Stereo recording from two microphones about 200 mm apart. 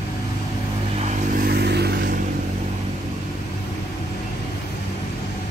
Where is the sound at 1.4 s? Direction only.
50° right (ahead or behind).